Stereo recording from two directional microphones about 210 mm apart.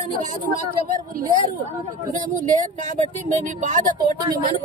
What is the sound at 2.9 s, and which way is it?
Speech, 35° right (ahead or behind).